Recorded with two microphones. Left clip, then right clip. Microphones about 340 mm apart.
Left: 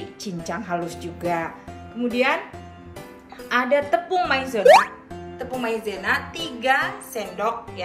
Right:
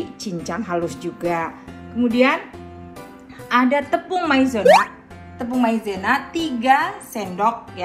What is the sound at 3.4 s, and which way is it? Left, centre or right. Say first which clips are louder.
A woman's voice: right 2 dB; centre.